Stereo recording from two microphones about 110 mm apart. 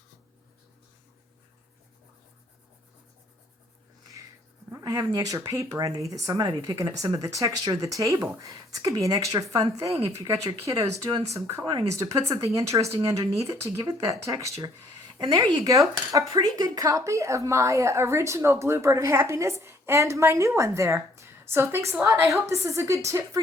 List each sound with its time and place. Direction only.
4.8 s speech: 30° right (ahead or behind)